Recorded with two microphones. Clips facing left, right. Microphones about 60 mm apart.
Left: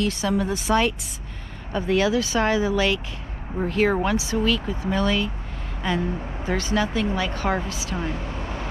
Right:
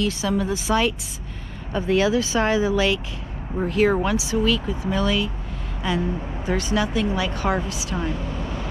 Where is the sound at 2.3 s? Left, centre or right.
Left.